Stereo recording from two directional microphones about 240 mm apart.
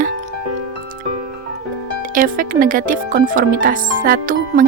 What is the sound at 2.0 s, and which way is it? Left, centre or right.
Speech, right.